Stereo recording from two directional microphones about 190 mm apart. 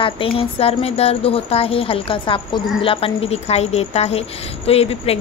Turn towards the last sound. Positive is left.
turn(degrees=30)  # may be behind; listen again after turning